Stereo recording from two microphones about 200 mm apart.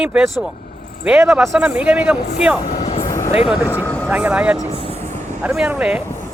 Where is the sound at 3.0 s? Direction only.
15° left (ahead or behind).